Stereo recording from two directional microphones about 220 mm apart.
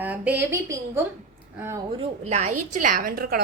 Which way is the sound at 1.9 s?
30° right (ahead or behind).